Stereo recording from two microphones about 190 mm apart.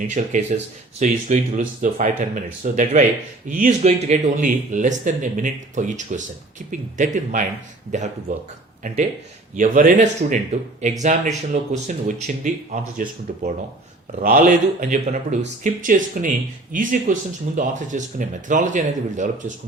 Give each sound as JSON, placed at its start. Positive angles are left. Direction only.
{"t": 0.1, "sound": "speech", "side_deg": -40}
{"t": 9.6, "sound": "speech", "side_deg": -45}
{"t": 14.2, "sound": "speech", "side_deg": -45}